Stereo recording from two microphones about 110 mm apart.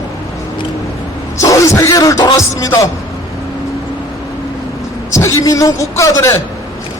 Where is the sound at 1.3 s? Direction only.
30° left (ahead or behind).